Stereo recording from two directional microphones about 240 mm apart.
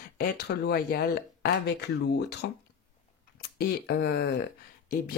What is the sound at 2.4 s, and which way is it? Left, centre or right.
Speech, left.